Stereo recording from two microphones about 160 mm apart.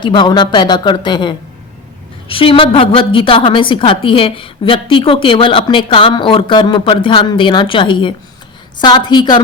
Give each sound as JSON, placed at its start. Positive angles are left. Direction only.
{"t": 0.0, "sound": "a woman's voice", "side_deg": 30}